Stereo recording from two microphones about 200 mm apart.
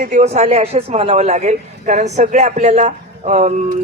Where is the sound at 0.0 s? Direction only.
35° right (ahead or behind).